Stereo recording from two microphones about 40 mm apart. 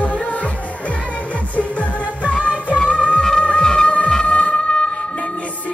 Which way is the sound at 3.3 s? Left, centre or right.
Left.